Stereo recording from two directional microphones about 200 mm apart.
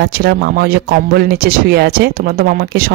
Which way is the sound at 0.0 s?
55° right (ahead or behind).